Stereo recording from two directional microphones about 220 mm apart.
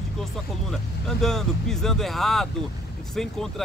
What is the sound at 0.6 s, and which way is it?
Speech, centre (ahead or behind).